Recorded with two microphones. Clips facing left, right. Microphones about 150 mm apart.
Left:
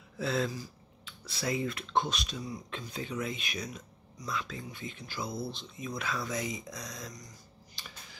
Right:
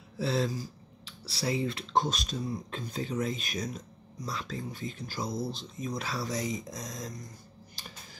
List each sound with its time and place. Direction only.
0.2 s speech: 30° right (ahead or behind)